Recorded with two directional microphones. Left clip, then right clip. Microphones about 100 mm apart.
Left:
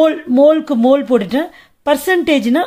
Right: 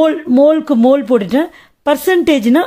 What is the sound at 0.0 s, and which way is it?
Speech, 40° right (ahead or behind).